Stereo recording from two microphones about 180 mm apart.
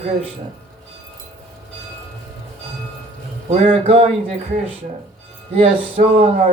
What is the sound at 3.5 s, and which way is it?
Speech, 35° right (ahead or behind).